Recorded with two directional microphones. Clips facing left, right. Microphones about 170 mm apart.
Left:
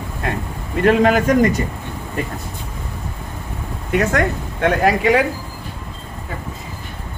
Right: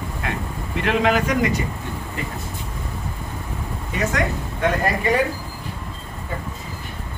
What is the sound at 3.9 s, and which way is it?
Speech, 55° left (ahead or behind).